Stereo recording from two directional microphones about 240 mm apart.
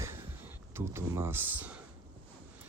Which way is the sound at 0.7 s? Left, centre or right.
Centre.